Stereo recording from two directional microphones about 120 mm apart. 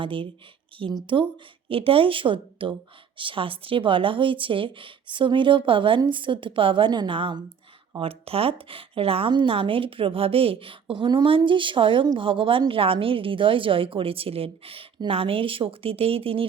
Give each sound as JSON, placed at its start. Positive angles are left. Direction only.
{"t": 0.0, "sound": "a woman's voice", "side_deg": -45}